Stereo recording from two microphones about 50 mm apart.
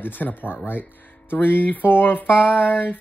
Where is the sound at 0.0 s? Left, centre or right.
Left.